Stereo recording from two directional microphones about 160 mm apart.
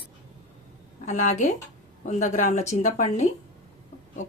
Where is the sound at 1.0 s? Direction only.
45° left (ahead or behind).